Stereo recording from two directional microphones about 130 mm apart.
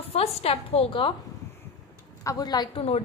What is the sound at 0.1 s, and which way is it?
Speech, 50° left (ahead or behind).